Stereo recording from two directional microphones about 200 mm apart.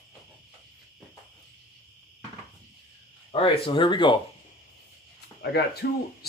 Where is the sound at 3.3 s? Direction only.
25° left (ahead or behind).